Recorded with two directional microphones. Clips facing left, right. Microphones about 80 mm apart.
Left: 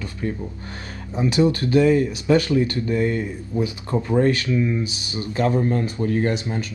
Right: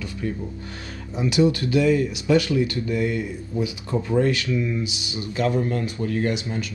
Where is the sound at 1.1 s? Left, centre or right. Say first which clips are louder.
Left 1 dB; left.